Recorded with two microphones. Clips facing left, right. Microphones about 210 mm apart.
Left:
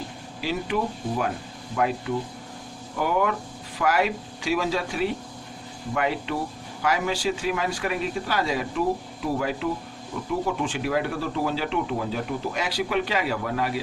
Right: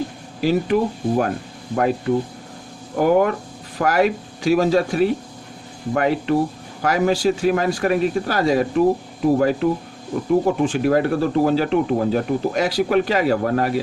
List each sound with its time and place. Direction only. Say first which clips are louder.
0.4 s speech: right 9 dB; 45° right (ahead or behind)